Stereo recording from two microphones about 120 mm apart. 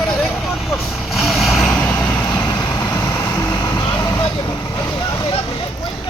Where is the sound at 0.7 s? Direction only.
Centre (ahead or behind).